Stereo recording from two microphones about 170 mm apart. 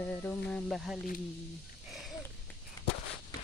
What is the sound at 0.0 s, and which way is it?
Cricket, 10° left (ahead or behind).